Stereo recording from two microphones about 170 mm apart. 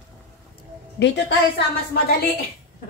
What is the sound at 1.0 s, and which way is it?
A woman's voice, 90° left.